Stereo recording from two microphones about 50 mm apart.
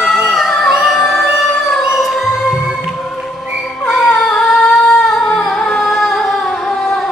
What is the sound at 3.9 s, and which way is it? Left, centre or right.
Singing, centre.